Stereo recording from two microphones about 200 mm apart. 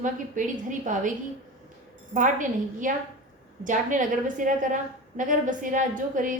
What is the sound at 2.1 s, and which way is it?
A woman's voice, 40° right (ahead or behind).